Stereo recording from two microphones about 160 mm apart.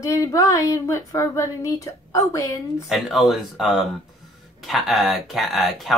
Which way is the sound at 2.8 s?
Centre (ahead or behind).